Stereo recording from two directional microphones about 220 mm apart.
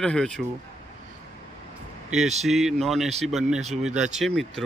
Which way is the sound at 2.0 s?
Centre (ahead or behind).